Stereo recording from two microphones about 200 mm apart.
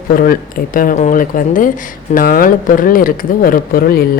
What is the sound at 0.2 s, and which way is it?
Speech, 45° left (ahead or behind).